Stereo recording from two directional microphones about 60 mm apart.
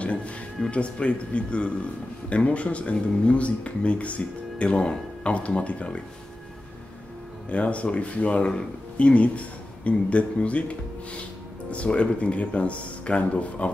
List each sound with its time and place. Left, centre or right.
0.7 s speech: centre
7.4 s speech: left